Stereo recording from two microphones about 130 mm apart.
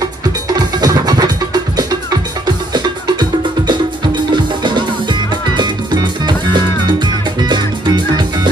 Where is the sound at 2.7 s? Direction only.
35° right (ahead or behind).